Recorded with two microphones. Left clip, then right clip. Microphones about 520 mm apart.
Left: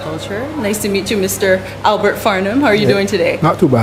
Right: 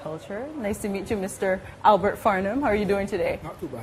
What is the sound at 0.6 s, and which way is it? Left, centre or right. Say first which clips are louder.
A woman's voice: left 13 dB; right.